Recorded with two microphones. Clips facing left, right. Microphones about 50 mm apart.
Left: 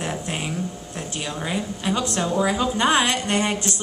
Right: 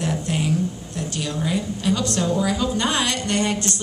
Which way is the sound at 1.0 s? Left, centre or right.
Left.